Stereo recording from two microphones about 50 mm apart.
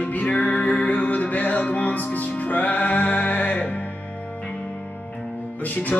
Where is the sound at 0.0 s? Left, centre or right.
Left.